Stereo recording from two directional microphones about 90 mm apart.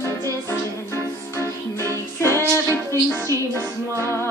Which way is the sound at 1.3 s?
30° left (ahead or behind).